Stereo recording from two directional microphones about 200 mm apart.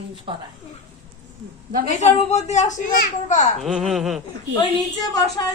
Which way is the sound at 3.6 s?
Centre (ahead or behind).